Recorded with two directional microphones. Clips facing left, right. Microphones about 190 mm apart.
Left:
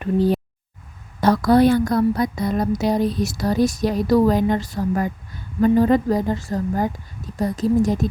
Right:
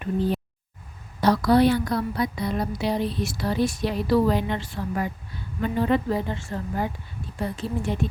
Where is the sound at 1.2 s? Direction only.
50° left (ahead or behind).